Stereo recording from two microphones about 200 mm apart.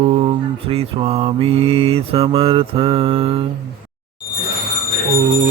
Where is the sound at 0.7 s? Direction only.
30° right (ahead or behind).